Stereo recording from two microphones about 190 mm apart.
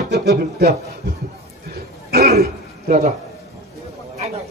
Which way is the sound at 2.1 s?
55° right (ahead or behind).